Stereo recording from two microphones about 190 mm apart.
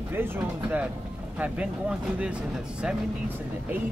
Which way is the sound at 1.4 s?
5° right (ahead or behind).